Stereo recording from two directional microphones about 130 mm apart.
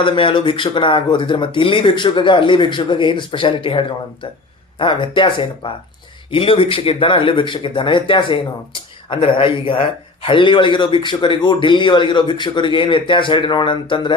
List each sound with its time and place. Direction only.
0.0 s speech: 40° left (ahead or behind)